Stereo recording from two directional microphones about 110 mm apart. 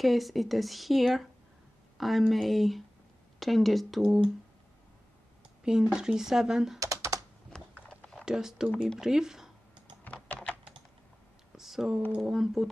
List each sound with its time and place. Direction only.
0.0 s speech: centre (ahead or behind)
5.6 s speech: 5° right (ahead or behind)
6.8 s typing: 30° right (ahead or behind)
7.8 s typing: 10° left (ahead or behind)
8.3 s speech: 5° right (ahead or behind)
10.0 s typing: 15° left (ahead or behind)
11.5 s a sound: 5° right (ahead or behind)
12.2 s speech: 5° right (ahead or behind)